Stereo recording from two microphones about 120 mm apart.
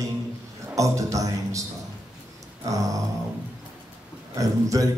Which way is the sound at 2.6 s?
30° right (ahead or behind).